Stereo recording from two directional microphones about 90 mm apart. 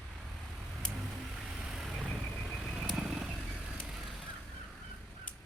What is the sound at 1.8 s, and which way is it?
Vehicle, 5° right (ahead or behind).